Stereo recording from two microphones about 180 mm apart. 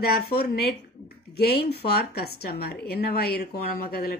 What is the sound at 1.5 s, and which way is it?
A woman's voice, 60° left (ahead or behind).